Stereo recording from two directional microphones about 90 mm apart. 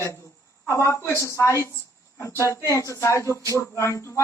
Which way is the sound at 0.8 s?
30° left (ahead or behind).